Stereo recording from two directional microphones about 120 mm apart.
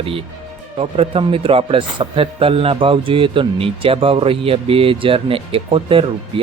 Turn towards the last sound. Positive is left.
turn(degrees=-50)  # may be behind; listen again after turning